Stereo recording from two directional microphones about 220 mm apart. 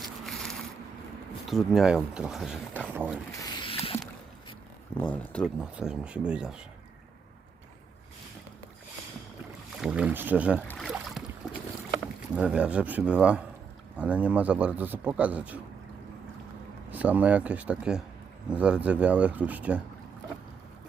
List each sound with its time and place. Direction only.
0.0 s a sound: centre (ahead or behind)
1.5 s speech: centre (ahead or behind)
3.4 s a sound: 25° left (ahead or behind)
4.9 s speech: 5° left (ahead or behind)
9.8 s a man's voice: 5° right (ahead or behind)
10.7 s boat: centre (ahead or behind)
12.3 s a man's voice: 5° right (ahead or behind)
16.9 s a man's voice: 5° right (ahead or behind)